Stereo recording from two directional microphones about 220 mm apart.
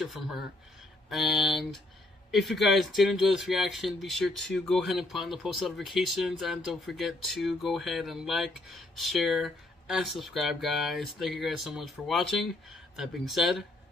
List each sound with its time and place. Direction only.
0.0 s speech: centre (ahead or behind)